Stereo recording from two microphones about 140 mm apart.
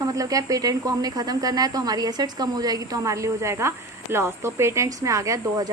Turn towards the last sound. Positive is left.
turn(degrees=-20)  # may be behind; listen again after turning